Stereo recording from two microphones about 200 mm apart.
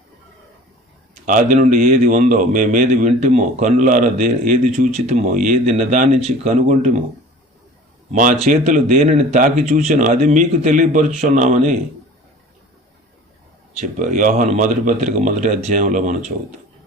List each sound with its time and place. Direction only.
1.2 s a man's voice: 40° right (ahead or behind)
8.1 s a man's voice: 40° right (ahead or behind)
13.9 s a man's voice: 40° right (ahead or behind)